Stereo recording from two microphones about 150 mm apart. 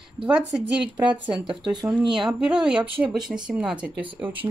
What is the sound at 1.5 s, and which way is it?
Speech, 30° right (ahead or behind).